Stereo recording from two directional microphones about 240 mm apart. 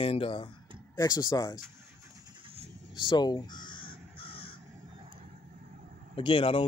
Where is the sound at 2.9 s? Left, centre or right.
Centre.